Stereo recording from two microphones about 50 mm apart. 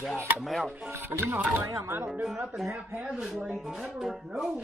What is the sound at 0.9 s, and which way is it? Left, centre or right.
Speech, right.